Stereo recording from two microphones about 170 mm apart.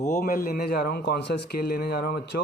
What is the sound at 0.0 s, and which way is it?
A man's voice, 50° left (ahead or behind).